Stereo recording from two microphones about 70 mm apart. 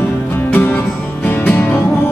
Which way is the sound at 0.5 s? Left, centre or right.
Left.